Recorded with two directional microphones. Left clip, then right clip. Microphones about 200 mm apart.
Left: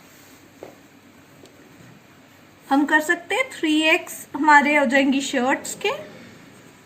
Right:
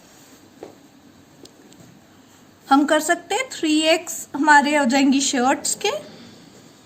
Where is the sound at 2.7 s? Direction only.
45° right (ahead or behind).